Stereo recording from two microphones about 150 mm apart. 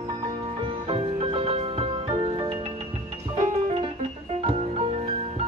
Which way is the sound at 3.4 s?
45° right (ahead or behind).